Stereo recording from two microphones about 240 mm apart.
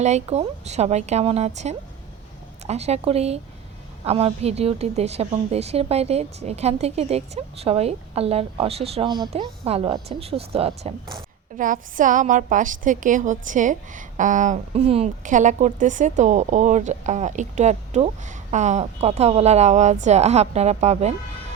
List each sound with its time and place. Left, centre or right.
0.0 s a woman's voice: right